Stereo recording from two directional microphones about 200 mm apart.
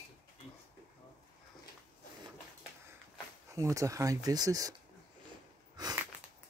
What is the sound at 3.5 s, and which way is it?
Speech, 15° right (ahead or behind).